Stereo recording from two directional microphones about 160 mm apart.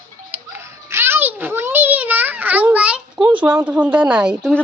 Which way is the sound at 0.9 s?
15° right (ahead or behind).